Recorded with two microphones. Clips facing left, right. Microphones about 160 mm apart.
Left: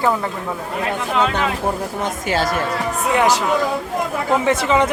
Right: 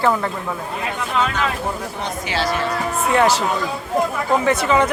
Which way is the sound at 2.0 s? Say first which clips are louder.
Left 2 dB; 45° left (ahead or behind).